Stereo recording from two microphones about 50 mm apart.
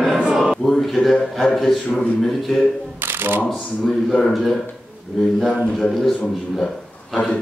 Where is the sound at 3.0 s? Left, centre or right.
Right.